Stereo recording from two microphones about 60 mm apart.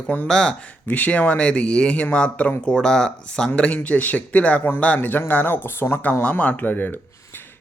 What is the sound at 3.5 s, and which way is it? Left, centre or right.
Speech, left.